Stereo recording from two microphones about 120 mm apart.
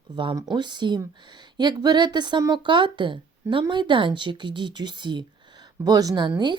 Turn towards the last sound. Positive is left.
turn(degrees=-40)  # may be behind; listen again after turning